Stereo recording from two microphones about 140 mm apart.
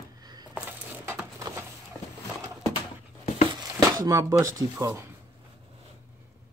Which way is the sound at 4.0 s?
20° right (ahead or behind).